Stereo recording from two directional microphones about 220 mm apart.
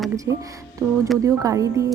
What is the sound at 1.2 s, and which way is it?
Speech, 15° right (ahead or behind).